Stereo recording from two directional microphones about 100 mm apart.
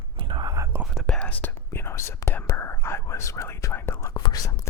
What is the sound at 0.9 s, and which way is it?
Whispering, 10° left (ahead or behind).